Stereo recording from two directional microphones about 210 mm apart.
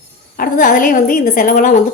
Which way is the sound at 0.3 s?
40° left (ahead or behind).